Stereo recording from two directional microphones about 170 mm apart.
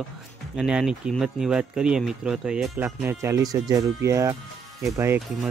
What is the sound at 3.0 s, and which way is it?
Speech, 15° right (ahead or behind).